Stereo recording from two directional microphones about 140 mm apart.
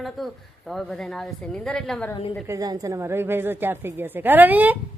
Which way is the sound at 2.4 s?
25° right (ahead or behind).